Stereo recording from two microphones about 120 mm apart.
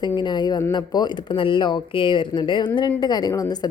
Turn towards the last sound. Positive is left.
turn(degrees=30)  # may be behind; listen again after turning